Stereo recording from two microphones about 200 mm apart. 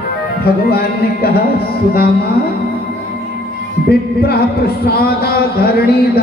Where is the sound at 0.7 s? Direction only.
50° left (ahead or behind).